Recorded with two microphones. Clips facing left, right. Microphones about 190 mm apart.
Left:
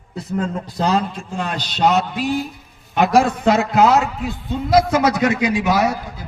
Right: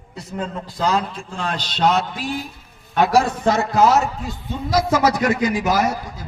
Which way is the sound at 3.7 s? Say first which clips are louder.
Even; 60° left (ahead or behind).